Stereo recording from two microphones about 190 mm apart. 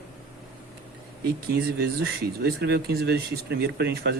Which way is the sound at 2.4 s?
55° right (ahead or behind).